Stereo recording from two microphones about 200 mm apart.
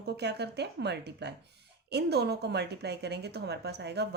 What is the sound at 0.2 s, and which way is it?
A woman's voice, 55° right (ahead or behind).